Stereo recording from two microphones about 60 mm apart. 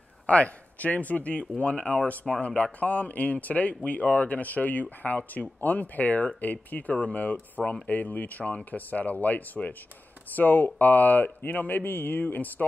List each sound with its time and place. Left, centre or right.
0.3 s speech: left
7.9 s speech: left